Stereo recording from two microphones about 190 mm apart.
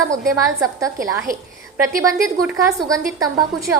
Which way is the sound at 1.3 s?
50° right (ahead or behind).